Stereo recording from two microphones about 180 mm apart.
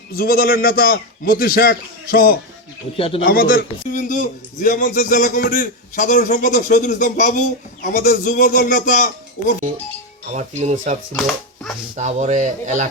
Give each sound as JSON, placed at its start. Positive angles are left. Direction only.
{"t": 0.1, "sound": "a man's voice", "side_deg": 55}
{"t": 10.3, "sound": "a man's voice", "side_deg": -40}
{"t": 11.9, "sound": "a man's voice", "side_deg": -40}